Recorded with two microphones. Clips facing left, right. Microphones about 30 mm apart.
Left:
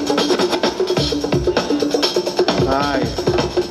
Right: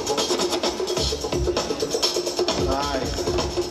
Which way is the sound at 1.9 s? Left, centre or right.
Left.